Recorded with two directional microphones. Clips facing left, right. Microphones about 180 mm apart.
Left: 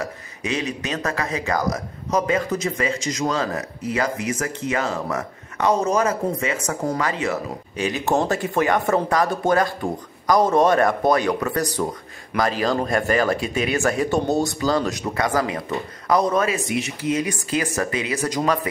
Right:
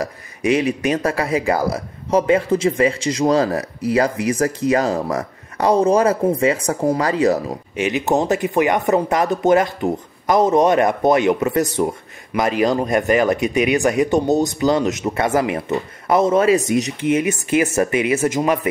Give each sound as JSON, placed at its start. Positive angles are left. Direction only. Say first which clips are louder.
{"t": 0.4, "sound": "speech", "louder": "right 8 dB", "side_deg": -10}
{"t": 1.0, "sound": "a man's voice", "louder": "right 6 dB", "side_deg": -30}
{"t": 7.7, "sound": "speech", "louder": "right 3 dB", "side_deg": -20}
{"t": 16.5, "sound": "a man's voice", "louder": "right 7 dB", "side_deg": -40}
{"t": 17.1, "sound": "speech", "louder": "right 5 dB", "side_deg": -20}